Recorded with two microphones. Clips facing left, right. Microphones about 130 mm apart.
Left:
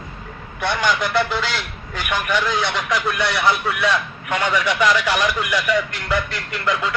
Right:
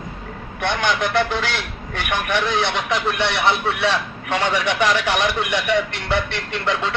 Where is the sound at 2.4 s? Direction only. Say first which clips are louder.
Right 1 dB; 25° right (ahead or behind).